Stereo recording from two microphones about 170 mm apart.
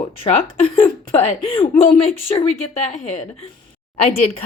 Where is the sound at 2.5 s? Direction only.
45° left (ahead or behind).